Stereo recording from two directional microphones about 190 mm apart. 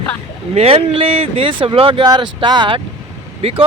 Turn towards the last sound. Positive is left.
turn(degrees=-30)  # may be behind; listen again after turning